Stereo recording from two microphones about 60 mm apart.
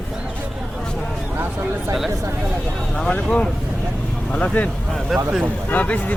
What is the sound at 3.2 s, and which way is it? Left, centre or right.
Speech, centre.